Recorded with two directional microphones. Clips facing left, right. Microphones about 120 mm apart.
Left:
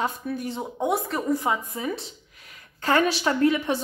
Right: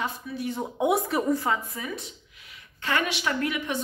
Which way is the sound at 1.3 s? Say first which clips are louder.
Left 1 dB; 15° left (ahead or behind).